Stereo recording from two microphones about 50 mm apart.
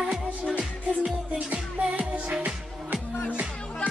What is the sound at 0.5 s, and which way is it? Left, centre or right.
Music, right.